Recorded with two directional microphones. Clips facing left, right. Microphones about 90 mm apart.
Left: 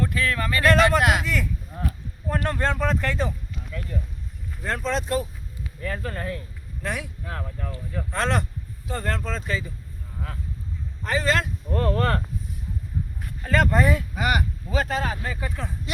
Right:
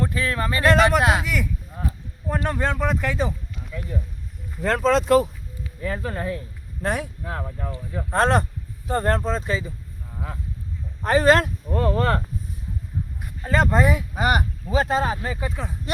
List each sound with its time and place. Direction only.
0.0 s speech: 25° right (ahead or behind)
1.2 s a sound: 10° right (ahead or behind)
2.2 s speech: 10° right (ahead or behind)
4.6 s speech: 90° right
5.8 s speech: 15° right (ahead or behind)
6.8 s speech: 40° right (ahead or behind)
7.3 s speech: 20° right (ahead or behind)
8.1 s speech: 35° right (ahead or behind)
11.0 s speech: 40° right (ahead or behind)
11.7 s speech: 10° right (ahead or behind)
14.2 s speech: 35° right (ahead or behind); by 15.7 s 15° right (ahead or behind)